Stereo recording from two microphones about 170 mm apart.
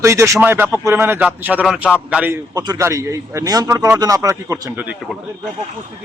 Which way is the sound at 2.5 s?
20° right (ahead or behind).